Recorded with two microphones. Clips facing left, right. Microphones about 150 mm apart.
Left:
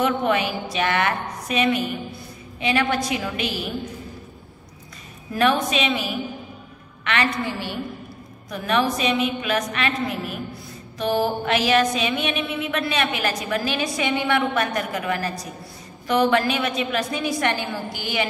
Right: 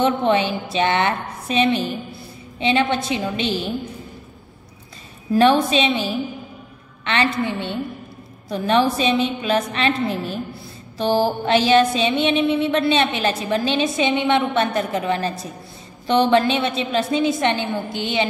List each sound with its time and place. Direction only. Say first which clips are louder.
0.0 s a woman's voice: right 3 dB; 25° right (ahead or behind)
5.3 s a woman's voice: right 5 dB; 30° right (ahead or behind)